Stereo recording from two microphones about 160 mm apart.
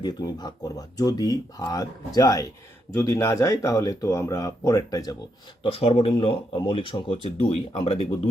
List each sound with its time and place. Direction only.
0.0 s speech: 25° left (ahead or behind)
5.6 s speech: 35° left (ahead or behind)